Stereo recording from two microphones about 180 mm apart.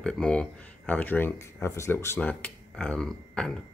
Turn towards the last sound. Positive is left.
turn(degrees=5)  # may be behind; listen again after turning